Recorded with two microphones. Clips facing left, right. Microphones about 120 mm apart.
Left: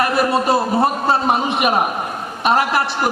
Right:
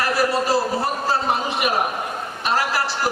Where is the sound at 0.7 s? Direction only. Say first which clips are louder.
Left 6 dB; 55° left (ahead or behind).